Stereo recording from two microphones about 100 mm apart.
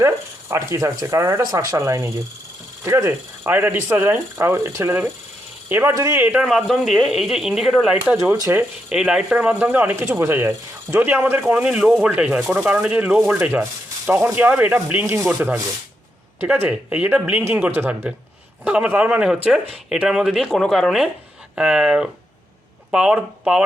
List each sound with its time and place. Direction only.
0.0 s speech: 30° right (ahead or behind)
6.5 s speech: centre (ahead or behind)
8.1 s speech: 25° right (ahead or behind)
8.9 s speech: 5° right (ahead or behind); by 15.3 s 25° right (ahead or behind)
15.3 s speech: 10° right (ahead or behind)
16.4 s speech: 20° right (ahead or behind)